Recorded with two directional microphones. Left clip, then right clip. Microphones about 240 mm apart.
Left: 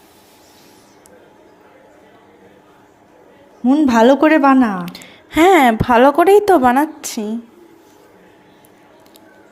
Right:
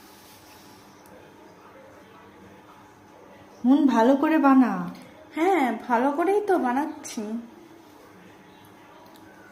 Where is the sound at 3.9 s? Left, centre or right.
Left.